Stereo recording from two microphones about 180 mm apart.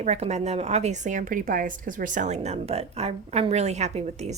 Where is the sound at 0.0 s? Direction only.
40° right (ahead or behind).